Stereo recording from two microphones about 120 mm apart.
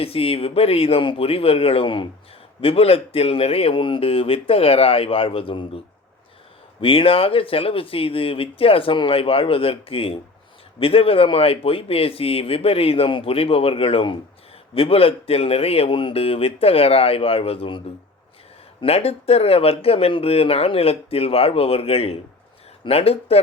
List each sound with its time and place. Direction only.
0.0 s speech: 55° left (ahead or behind)
6.8 s speech: 50° left (ahead or behind)
18.8 s speech: 60° left (ahead or behind)